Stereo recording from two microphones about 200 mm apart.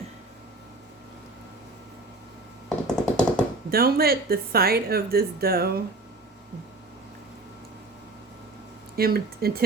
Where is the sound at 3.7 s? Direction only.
50° right (ahead or behind).